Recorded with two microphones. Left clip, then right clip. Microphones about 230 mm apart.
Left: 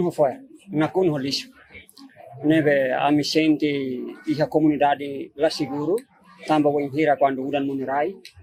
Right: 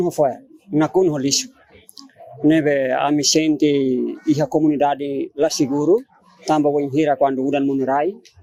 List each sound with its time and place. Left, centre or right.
0.0 s speech: right
2.5 s speech: right